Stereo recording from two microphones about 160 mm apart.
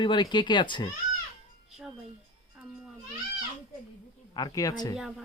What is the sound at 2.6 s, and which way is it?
Speech, 5° right (ahead or behind).